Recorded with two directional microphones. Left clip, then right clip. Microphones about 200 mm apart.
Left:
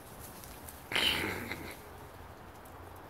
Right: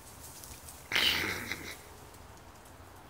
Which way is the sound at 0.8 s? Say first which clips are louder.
Right 2 dB; centre (ahead or behind).